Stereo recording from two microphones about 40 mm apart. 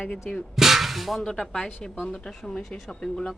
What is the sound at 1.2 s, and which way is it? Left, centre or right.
Speech, centre.